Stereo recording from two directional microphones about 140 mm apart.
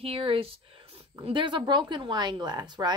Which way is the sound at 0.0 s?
40° right (ahead or behind).